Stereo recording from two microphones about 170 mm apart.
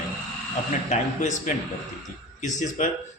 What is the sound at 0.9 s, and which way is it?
Speech, 45° left (ahead or behind).